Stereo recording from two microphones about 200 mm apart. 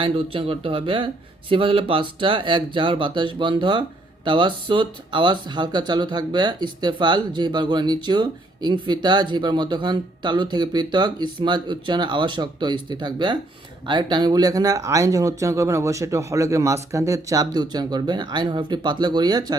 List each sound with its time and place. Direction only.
0.0 s speech: 25° right (ahead or behind)